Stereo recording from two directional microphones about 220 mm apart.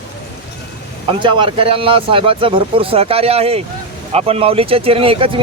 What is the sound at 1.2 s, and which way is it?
Speech, 20° right (ahead or behind).